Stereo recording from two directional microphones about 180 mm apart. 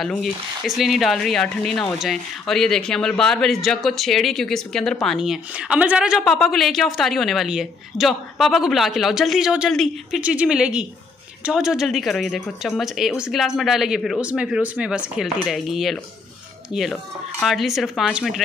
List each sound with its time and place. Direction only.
0.0 s a woman's voice: centre (ahead or behind)